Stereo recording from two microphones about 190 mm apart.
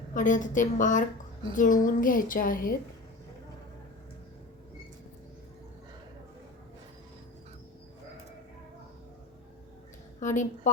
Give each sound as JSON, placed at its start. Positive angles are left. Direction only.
{"t": 0.1, "sound": "speech", "side_deg": 40}
{"t": 10.2, "sound": "a woman's voice", "side_deg": 40}